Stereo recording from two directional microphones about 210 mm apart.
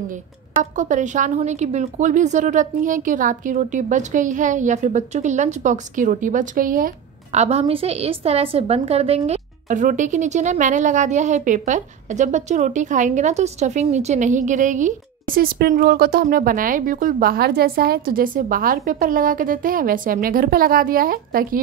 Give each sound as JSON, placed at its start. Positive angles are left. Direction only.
{"t": 0.7, "sound": "a woman's voice", "side_deg": -35}
{"t": 7.3, "sound": "a woman's voice", "side_deg": -30}